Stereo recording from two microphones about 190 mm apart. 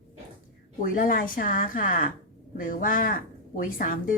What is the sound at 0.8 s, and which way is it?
A woman's voice, 45° left (ahead or behind).